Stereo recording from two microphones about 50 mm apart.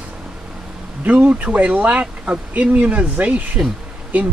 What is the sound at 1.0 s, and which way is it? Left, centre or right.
Speech, right.